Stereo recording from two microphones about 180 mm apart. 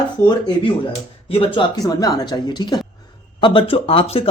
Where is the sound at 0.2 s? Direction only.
25° left (ahead or behind).